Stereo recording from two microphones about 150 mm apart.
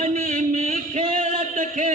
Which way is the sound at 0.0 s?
50° right (ahead or behind).